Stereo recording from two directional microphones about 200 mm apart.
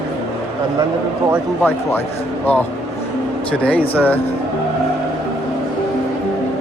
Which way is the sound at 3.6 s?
10° left (ahead or behind).